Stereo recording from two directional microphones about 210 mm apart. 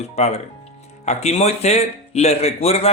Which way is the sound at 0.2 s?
30° left (ahead or behind).